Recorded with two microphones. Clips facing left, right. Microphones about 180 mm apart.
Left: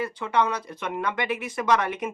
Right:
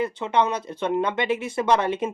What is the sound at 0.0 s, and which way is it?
Speech, 25° right (ahead or behind).